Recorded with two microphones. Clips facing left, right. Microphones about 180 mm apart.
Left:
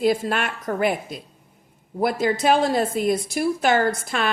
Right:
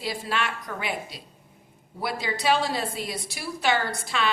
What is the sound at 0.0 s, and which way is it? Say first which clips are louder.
A woman's voice: left 8 dB; 50° left (ahead or behind).